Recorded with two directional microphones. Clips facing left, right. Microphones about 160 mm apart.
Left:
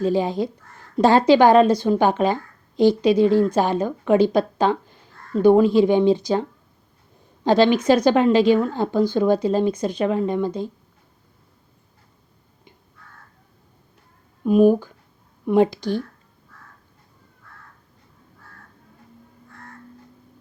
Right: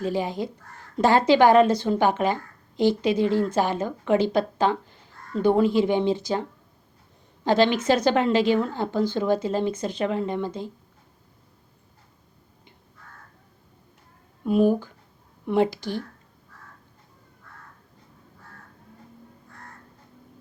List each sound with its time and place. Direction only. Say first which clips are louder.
0.1 s speech: left 5 dB; 20° left (ahead or behind)
7.4 s speech: left 4 dB; 15° left (ahead or behind)
14.4 s speech: left 5 dB; 15° left (ahead or behind)